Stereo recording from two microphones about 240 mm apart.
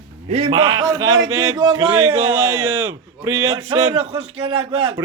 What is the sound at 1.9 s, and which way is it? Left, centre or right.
Speech, right.